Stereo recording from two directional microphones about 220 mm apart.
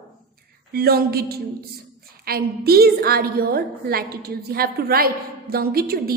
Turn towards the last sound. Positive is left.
turn(degrees=-45)  # may be behind; listen again after turning